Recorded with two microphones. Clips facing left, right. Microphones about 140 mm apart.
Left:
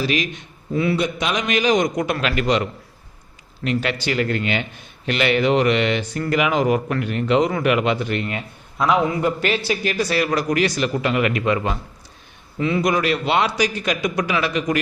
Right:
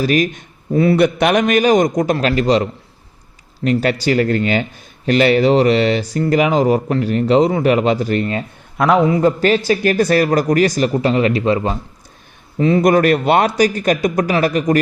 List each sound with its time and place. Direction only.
0.0 s a man's voice: 45° right (ahead or behind)
0.9 s a man's voice: 60° right (ahead or behind); by 8.4 s 40° right (ahead or behind)
9.0 s speech: 25° right (ahead or behind)
9.4 s a man's voice: 40° right (ahead or behind)
12.8 s a man's voice: 50° right (ahead or behind)